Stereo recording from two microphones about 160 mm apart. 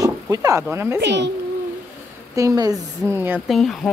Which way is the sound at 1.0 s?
90° right.